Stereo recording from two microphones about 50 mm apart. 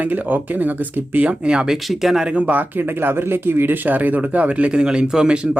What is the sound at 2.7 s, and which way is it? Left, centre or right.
Speech, right.